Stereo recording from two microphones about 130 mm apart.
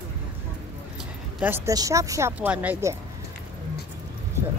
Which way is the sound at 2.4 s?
10° right (ahead or behind).